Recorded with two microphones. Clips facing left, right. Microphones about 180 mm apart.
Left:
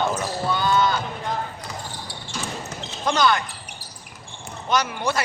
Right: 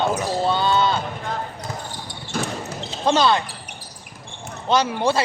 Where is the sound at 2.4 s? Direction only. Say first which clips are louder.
Right 3 dB; 30° right (ahead or behind).